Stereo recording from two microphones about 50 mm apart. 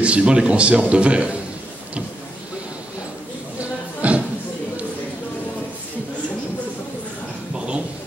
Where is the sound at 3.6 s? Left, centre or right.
Right.